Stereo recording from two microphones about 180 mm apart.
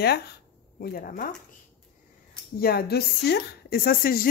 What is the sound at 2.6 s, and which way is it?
A woman's voice, 60° left (ahead or behind).